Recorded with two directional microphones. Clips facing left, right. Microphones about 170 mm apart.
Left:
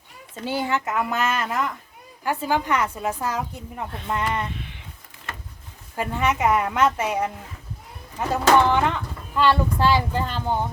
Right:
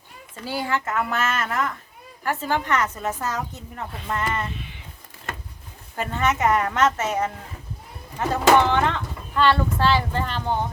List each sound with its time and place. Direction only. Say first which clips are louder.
0.4 s a woman's voice: left 1 dB; 20° left (ahead or behind)
6.0 s a woman's voice: even; 10° left (ahead or behind)
8.6 s a woman's voice: left 1 dB; 10° left (ahead or behind)